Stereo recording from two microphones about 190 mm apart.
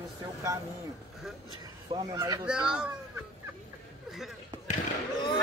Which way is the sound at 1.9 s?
20° right (ahead or behind).